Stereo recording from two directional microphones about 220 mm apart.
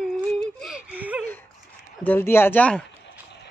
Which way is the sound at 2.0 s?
10° left (ahead or behind).